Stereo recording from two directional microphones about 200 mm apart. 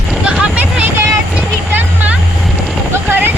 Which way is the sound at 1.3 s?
5° right (ahead or behind).